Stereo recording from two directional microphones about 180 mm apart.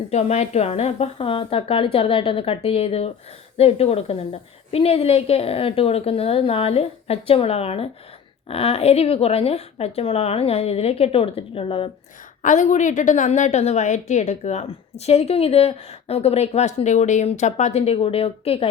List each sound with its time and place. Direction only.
0.1 s a woman's voice: 40° left (ahead or behind)
12.4 s a woman's voice: 45° left (ahead or behind)